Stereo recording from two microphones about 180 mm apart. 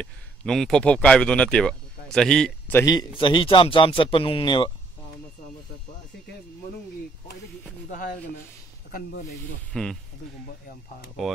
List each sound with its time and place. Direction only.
0.0 s speech: 5° left (ahead or behind)
2.8 s speech: 20° left (ahead or behind)
7.9 s speech: 50° left (ahead or behind)
9.7 s speech: 5° left (ahead or behind)